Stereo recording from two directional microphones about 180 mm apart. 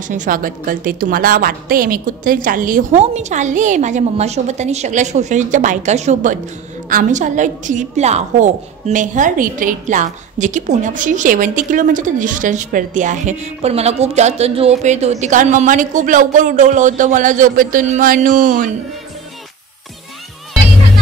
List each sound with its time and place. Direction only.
0.1 s a woman's voice: 45° right (ahead or behind)